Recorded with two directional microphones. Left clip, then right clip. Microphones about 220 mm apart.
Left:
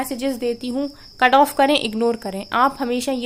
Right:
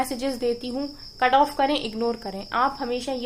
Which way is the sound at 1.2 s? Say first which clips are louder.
Left 5 dB; 50° left (ahead or behind).